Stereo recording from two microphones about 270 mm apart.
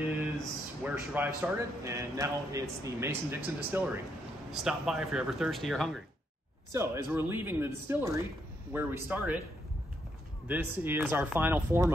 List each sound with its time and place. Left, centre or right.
0.4 s speech: centre
10.5 s speech: centre